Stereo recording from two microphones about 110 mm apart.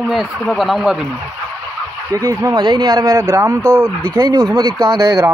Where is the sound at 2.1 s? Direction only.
30° right (ahead or behind).